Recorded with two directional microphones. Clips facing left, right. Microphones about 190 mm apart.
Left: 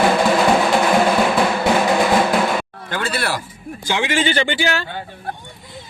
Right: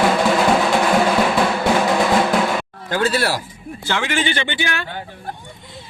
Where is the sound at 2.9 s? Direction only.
40° right (ahead or behind).